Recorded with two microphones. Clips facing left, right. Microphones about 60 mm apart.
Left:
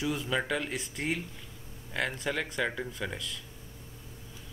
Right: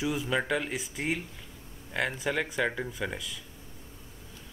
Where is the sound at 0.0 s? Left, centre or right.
Centre.